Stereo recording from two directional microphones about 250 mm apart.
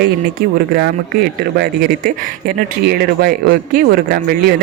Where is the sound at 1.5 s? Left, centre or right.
Right.